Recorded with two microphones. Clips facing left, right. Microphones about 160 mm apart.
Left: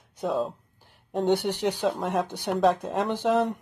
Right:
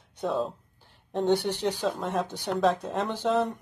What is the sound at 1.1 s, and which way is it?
Speech, 10° left (ahead or behind).